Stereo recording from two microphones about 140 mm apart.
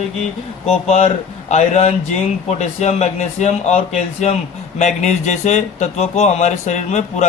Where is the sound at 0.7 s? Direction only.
50° left (ahead or behind).